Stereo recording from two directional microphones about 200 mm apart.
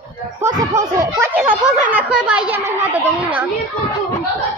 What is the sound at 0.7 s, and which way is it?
Speech, 15° right (ahead or behind).